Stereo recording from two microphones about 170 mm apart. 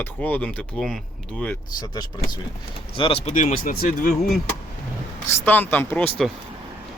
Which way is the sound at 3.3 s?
50° left (ahead or behind).